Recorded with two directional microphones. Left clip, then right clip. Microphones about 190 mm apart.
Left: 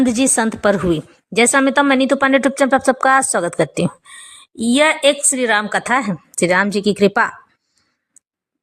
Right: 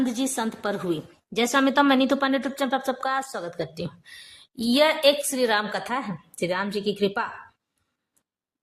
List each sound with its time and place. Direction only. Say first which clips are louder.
0.0 s a woman's voice: left 11 dB; 30° left (ahead or behind)
4.0 s a woman's voice: left 6 dB; 25° left (ahead or behind)
5.7 s a woman's voice: left 11 dB; 35° left (ahead or behind)